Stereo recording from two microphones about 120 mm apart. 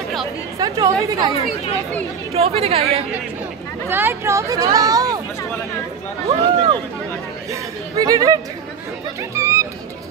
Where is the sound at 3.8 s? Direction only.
20° right (ahead or behind).